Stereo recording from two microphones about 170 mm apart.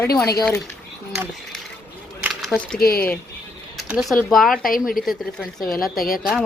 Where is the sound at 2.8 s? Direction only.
60° left (ahead or behind).